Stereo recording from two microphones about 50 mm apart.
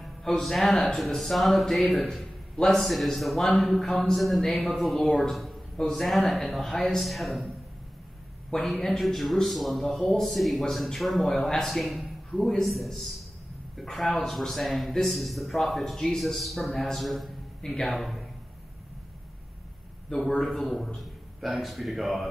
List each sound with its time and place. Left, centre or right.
0.0 s speech: centre
7.0 s speech: centre
8.6 s speech: centre
20.2 s speech: centre